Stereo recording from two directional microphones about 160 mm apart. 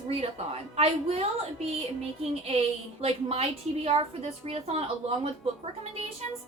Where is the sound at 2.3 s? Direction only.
40° right (ahead or behind).